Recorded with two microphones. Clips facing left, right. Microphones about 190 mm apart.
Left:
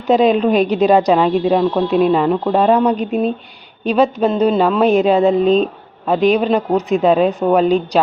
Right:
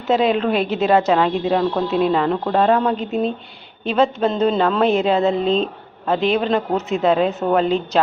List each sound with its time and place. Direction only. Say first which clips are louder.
0.1 s a woman's voice: left 5 dB; 15° left (ahead or behind)